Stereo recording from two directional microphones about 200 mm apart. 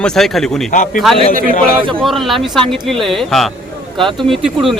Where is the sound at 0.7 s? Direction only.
40° left (ahead or behind).